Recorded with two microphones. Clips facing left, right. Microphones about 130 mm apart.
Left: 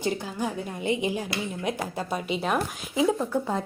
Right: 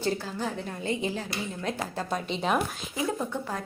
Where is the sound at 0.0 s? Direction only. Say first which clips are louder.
Left 1 dB; 15° left (ahead or behind).